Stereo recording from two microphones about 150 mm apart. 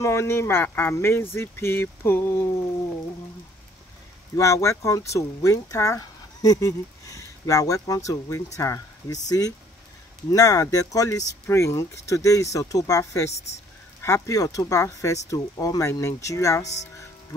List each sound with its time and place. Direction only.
0.0 s speech: 15° left (ahead or behind)
4.4 s speech: 20° left (ahead or behind)
10.3 s speech: 25° left (ahead or behind)
16.6 s speech: 50° left (ahead or behind)